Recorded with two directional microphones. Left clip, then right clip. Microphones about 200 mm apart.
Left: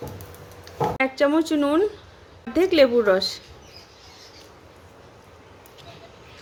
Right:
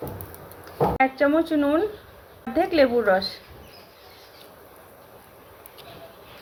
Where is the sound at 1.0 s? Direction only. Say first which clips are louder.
Even; 60° left (ahead or behind).